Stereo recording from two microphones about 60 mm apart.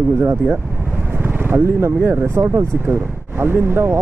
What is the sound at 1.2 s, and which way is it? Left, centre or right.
Speech, right.